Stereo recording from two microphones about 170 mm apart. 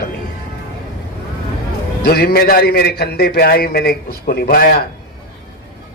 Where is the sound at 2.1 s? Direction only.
65° left (ahead or behind).